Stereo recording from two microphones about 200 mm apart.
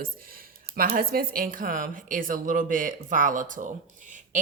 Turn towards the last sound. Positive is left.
turn(degrees=-40)  # may be behind; listen again after turning